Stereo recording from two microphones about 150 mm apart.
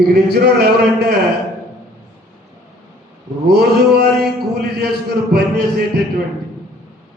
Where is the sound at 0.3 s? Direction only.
90° right.